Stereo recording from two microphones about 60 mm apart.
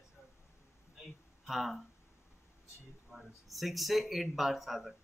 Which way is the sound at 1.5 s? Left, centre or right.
Centre.